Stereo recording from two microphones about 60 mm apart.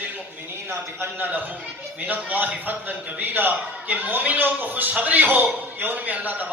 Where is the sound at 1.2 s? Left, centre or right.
Right.